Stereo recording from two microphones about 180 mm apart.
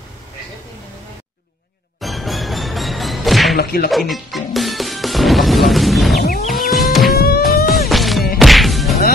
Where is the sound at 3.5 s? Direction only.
60° left (ahead or behind).